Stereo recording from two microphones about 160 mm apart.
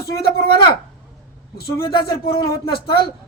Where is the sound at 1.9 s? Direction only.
75° left (ahead or behind).